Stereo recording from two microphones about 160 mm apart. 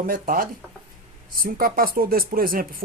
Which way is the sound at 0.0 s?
65° right (ahead or behind).